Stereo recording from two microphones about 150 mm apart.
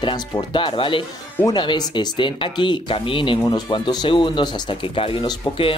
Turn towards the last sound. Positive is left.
turn(degrees=35)  # may be behind; listen again after turning